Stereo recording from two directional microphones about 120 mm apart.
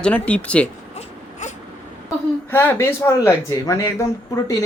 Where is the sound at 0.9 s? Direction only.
85° left.